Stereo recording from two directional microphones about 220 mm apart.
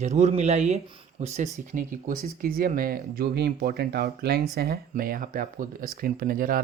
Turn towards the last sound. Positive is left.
turn(degrees=-40)  # may be behind; listen again after turning